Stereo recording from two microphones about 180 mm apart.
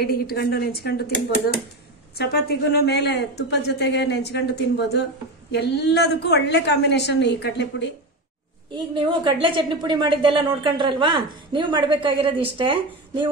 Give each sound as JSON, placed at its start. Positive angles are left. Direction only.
{"t": 0.0, "sound": "speech", "side_deg": 60}
{"t": 8.9, "sound": "a woman's voice", "side_deg": -25}